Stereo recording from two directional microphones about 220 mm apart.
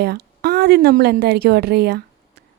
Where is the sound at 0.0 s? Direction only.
45° right (ahead or behind).